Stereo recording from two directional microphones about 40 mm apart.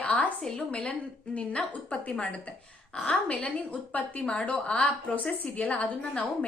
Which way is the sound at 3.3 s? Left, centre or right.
Left.